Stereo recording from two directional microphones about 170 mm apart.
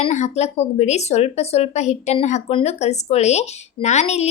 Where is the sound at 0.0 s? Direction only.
40° left (ahead or behind).